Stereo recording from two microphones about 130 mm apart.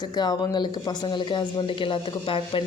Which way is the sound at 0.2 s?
30° left (ahead or behind).